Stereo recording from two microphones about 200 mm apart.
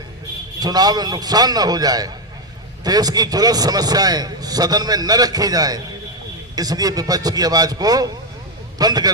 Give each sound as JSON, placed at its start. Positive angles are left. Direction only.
{"t": 0.6, "sound": "a man's voice", "side_deg": -20}